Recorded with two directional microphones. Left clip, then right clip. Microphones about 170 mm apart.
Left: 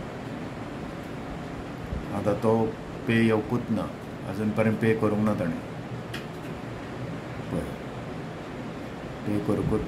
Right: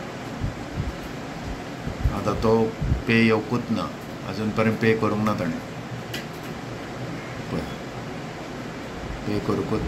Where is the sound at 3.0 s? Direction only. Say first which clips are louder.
Right 4 dB; 10° left (ahead or behind).